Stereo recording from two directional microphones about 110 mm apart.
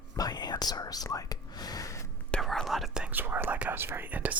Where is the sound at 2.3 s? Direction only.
5° left (ahead or behind).